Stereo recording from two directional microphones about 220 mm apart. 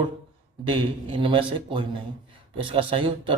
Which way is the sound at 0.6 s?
25° right (ahead or behind).